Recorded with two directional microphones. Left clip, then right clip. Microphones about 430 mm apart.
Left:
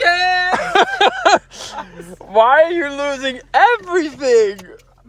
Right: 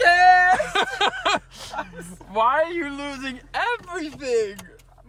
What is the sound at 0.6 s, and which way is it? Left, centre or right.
Speech, centre.